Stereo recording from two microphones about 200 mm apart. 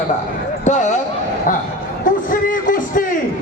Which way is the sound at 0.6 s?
35° left (ahead or behind).